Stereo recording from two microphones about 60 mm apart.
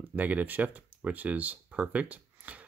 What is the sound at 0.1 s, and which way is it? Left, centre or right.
Speech, right.